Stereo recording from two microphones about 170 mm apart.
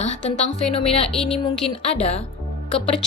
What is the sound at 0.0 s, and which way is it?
A woman's voice, 40° left (ahead or behind).